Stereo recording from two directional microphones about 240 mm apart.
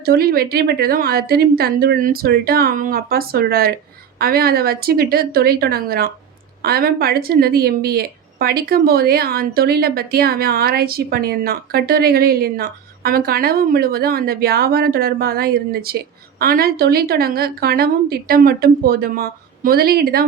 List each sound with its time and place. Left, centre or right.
0.0 s speech: right